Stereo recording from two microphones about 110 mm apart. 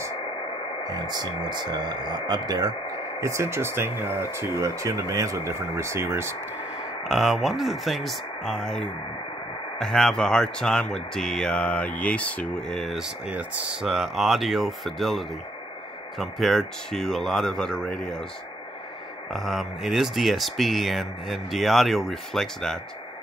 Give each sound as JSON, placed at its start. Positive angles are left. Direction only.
{"t": 0.8, "sound": "speech", "side_deg": -40}
{"t": 3.2, "sound": "speech", "side_deg": -25}
{"t": 7.1, "sound": "speech", "side_deg": 0}
{"t": 13.3, "sound": "speech", "side_deg": -10}
{"t": 13.8, "sound": "speech", "side_deg": 0}
{"t": 19.3, "sound": "speech", "side_deg": 0}